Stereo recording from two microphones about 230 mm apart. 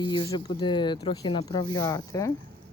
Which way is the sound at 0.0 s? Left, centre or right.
Centre.